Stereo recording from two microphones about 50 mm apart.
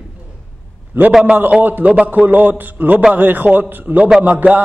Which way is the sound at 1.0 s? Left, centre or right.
Right.